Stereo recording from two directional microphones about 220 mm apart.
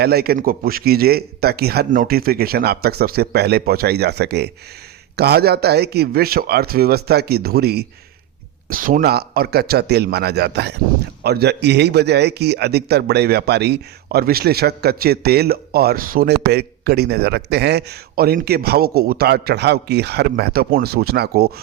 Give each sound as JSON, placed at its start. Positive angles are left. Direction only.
{"t": 0.0, "sound": "a man's voice", "side_deg": -45}